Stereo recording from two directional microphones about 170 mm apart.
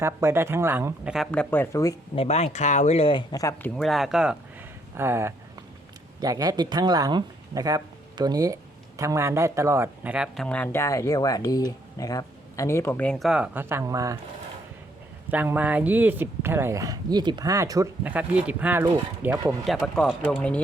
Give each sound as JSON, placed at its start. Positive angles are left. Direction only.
{"t": 0.0, "sound": "speech", "side_deg": -15}
{"t": 1.1, "sound": "speech", "side_deg": 5}
{"t": 2.1, "sound": "speech", "side_deg": 40}
{"t": 3.8, "sound": "speech", "side_deg": 0}
{"t": 4.9, "sound": "speech", "side_deg": -15}
{"t": 10.4, "sound": "speech", "side_deg": 10}
{"t": 15.3, "sound": "speech", "side_deg": -10}
{"t": 18.0, "sound": "speech", "side_deg": -10}